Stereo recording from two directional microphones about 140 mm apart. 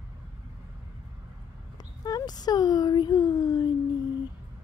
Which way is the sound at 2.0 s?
30° left (ahead or behind).